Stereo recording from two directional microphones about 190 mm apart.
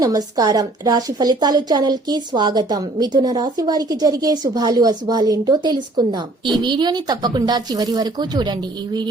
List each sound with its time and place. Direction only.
0.0 s a woman's voice: 20° right (ahead or behind)